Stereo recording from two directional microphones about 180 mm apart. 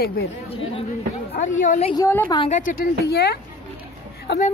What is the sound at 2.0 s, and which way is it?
Speech, 15° left (ahead or behind).